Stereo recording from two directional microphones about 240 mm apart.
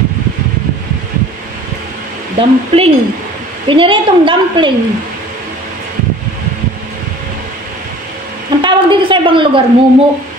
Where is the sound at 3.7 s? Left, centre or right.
Right.